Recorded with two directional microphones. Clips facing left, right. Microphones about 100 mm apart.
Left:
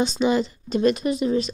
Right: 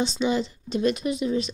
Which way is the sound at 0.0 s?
50° left (ahead or behind).